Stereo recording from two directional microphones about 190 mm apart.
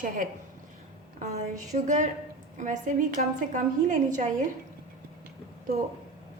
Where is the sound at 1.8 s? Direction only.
40° right (ahead or behind).